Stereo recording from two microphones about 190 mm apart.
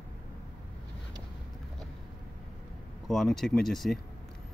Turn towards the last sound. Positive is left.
turn(degrees=0)  # may be behind; listen again after turning